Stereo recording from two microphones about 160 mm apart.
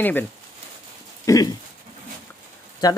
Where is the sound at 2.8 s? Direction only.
25° left (ahead or behind).